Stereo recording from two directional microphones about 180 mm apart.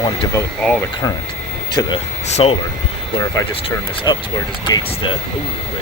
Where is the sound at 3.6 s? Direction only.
30° left (ahead or behind).